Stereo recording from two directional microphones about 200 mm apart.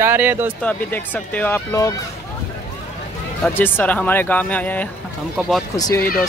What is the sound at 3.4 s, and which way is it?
Speech, 10° left (ahead or behind).